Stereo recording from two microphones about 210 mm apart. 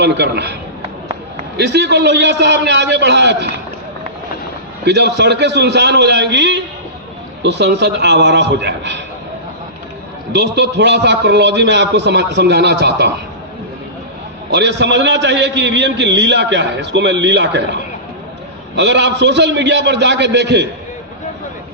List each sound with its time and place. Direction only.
0.0 s a man's voice: 55° right (ahead or behind)
1.5 s a man's voice: 55° right (ahead or behind)
4.9 s a man's voice: 55° right (ahead or behind)
10.3 s a man's voice: 55° right (ahead or behind)
14.5 s a man's voice: 55° right (ahead or behind)